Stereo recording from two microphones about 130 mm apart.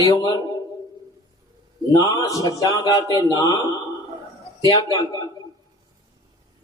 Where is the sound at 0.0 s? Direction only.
30° left (ahead or behind).